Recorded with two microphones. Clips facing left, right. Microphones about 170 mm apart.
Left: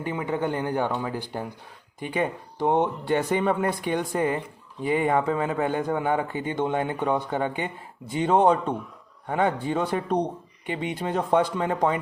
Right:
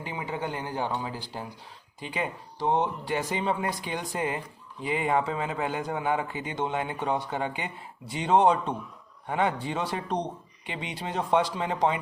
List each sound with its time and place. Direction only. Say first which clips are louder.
0.0 s speech: left 6 dB; 55° left (ahead or behind)
2.6 s a man's voice: left 4 dB; 55° left (ahead or behind)